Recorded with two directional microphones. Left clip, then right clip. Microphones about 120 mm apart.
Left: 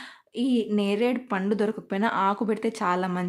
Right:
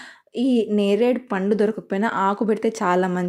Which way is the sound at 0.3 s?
25° right (ahead or behind).